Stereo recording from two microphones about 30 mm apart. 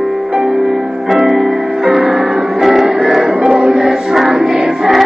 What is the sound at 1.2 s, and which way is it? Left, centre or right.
Music, right.